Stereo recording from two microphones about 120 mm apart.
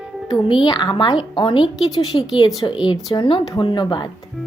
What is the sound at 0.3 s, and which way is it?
A woman's voice, 45° left (ahead or behind).